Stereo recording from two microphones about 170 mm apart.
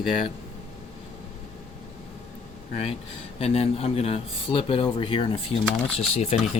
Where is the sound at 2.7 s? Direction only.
40° left (ahead or behind).